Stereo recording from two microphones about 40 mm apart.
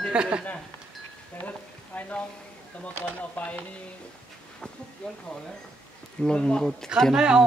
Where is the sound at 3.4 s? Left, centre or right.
Left.